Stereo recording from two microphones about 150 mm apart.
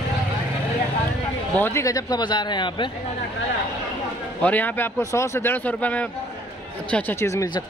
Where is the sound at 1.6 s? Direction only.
15° left (ahead or behind).